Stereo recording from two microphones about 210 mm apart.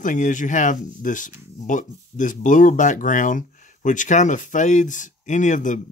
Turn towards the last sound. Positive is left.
turn(degrees=35)  # may be behind; listen again after turning